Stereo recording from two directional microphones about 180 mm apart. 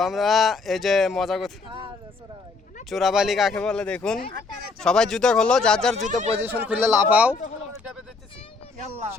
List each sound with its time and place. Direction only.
0.0 s speech: centre (ahead or behind)
2.9 s speech: centre (ahead or behind)
6.0 s speech: 40° right (ahead or behind)
6.4 s a man's voice: 10° right (ahead or behind)